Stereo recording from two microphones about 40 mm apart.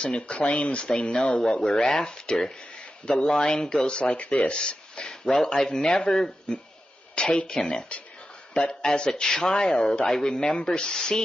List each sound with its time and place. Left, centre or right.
0.0 s speech: left
0.8 s speech: left
3.8 s speech: left
9.2 s speech: centre
9.5 s speech: left